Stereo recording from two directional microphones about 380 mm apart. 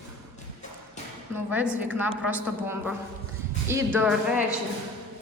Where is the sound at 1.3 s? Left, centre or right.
Centre.